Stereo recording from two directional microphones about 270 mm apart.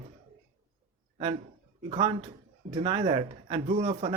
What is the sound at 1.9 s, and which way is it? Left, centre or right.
Speech, right.